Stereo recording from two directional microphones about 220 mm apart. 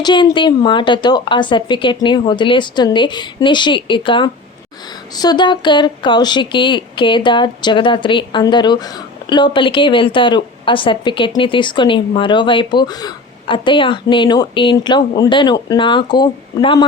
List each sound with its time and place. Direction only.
0.0 s a woman's voice: 20° left (ahead or behind)